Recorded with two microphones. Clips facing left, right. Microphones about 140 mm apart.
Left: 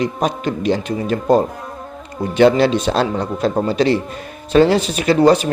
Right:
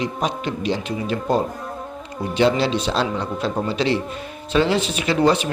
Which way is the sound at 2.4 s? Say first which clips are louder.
Left 6 dB; 50° left (ahead or behind).